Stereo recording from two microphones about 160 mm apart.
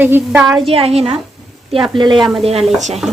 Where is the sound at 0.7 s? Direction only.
40° right (ahead or behind).